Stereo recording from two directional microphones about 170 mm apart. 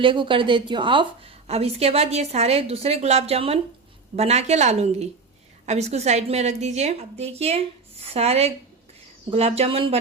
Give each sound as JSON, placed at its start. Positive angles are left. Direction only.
{"t": 0.0, "sound": "a woman's voice", "side_deg": -30}